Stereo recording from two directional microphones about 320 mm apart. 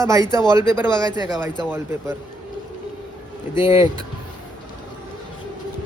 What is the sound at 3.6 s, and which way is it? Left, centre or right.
Speech, centre.